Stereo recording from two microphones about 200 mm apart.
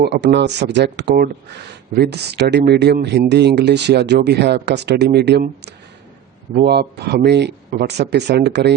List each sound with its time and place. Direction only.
0.0 s speech: 55° right (ahead or behind)